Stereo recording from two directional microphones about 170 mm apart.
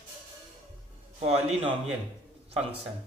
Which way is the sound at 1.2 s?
40° right (ahead or behind).